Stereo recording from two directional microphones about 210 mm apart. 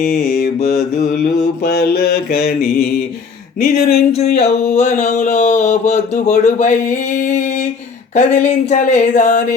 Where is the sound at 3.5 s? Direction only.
35° left (ahead or behind).